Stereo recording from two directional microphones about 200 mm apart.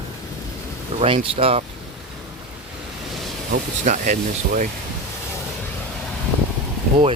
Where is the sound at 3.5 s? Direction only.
40° right (ahead or behind).